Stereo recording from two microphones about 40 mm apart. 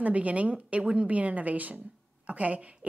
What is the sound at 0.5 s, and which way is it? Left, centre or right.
Speech, right.